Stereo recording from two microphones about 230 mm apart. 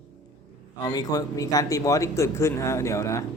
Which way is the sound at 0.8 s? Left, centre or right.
Centre.